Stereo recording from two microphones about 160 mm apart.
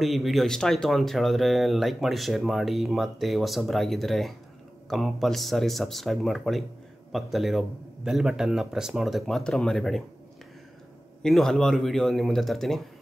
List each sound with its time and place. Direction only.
0.0 s speech: centre (ahead or behind)
11.2 s speech: centre (ahead or behind)